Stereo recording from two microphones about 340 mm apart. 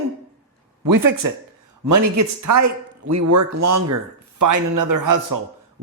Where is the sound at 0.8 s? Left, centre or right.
Right.